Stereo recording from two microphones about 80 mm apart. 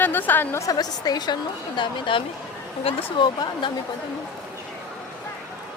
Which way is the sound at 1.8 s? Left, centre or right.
Left.